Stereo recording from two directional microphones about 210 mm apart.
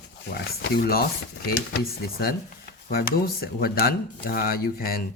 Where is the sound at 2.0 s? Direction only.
45° left (ahead or behind).